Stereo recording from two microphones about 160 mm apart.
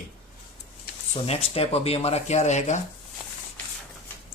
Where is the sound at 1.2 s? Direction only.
40° left (ahead or behind).